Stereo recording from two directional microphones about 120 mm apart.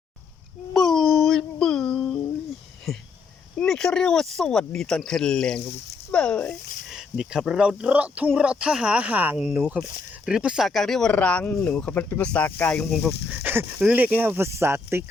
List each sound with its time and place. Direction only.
0.7 s a sound: centre (ahead or behind)
2.9 s speech: centre (ahead or behind)
6.9 s speech: 5° right (ahead or behind); by 12.8 s 15° left (ahead or behind)
12.8 s speech: centre (ahead or behind)
13.3 s speech: 15° right (ahead or behind)